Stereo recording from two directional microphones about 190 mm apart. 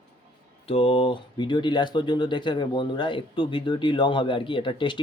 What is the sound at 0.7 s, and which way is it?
Speech, 30° left (ahead or behind).